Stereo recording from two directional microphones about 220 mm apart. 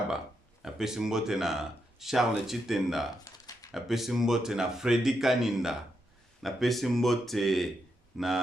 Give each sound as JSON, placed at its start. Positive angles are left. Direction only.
{"t": 0.6, "sound": "speech", "side_deg": 0}
{"t": 3.2, "sound": "a sound", "side_deg": 15}
{"t": 3.7, "sound": "speech", "side_deg": 0}